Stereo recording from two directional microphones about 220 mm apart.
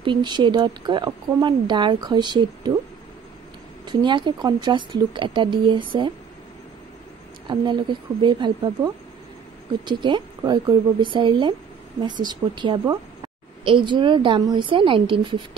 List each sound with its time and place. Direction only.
0.0 s speech: 20° right (ahead or behind)
3.8 s speech: 20° right (ahead or behind)
8.2 s speech: 20° right (ahead or behind)